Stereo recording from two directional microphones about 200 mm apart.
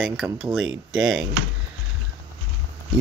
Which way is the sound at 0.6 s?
75° right (ahead or behind).